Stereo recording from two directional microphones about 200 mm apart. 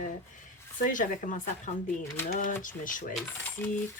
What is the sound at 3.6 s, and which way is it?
Coin, 10° left (ahead or behind).